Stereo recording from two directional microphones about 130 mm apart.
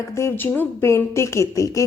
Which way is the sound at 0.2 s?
20° left (ahead or behind).